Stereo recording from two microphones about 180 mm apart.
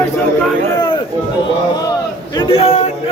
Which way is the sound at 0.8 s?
25° left (ahead or behind).